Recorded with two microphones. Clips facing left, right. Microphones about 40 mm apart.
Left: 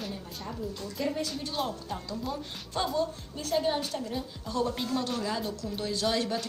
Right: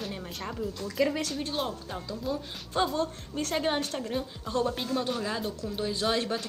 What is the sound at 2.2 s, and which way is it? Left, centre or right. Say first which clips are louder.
Speech: right 2 dB; centre.